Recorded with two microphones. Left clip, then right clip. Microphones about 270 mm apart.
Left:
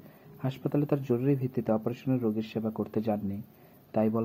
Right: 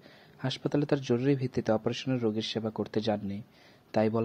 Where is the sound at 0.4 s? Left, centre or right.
Right.